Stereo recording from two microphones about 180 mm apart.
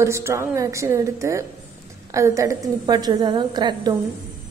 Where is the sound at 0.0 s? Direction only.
15° right (ahead or behind).